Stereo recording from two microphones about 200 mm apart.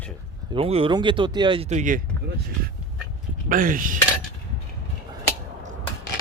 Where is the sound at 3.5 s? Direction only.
45° right (ahead or behind).